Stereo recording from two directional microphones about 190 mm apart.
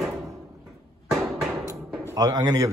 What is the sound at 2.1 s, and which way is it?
Speech, 20° right (ahead or behind).